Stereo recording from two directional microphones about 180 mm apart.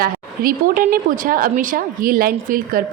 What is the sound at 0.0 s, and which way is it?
Speech, 55° right (ahead or behind).